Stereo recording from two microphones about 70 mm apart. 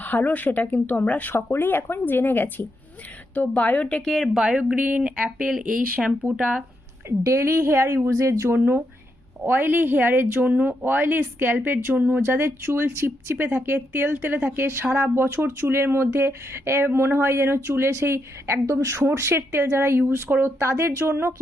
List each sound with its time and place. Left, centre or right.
0.0 s speech: left
4.0 s speech: centre
4.4 s speech: centre
6.3 s speech: centre
7.3 s speech: right